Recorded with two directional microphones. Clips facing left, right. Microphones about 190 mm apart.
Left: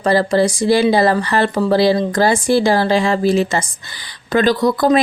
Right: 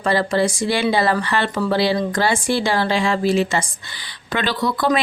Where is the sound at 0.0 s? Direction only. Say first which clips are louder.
Left 4 dB; 40° left (ahead or behind).